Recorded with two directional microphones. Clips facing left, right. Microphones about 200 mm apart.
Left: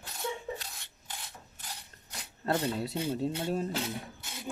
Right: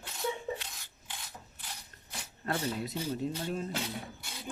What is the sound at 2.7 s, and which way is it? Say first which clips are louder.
Speech: left 3 dB; 30° left (ahead or behind).